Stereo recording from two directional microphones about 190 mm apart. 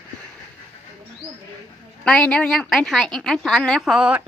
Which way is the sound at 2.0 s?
5° left (ahead or behind).